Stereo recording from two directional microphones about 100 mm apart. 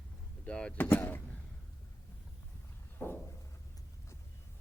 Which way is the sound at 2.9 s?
20° left (ahead or behind).